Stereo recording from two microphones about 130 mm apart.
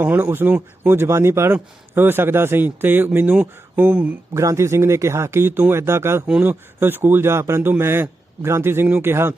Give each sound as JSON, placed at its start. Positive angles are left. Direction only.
{"t": 0.0, "sound": "speech", "side_deg": -15}
{"t": 4.4, "sound": "speech", "side_deg": -20}